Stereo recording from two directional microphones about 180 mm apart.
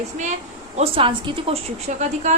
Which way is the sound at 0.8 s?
30° right (ahead or behind).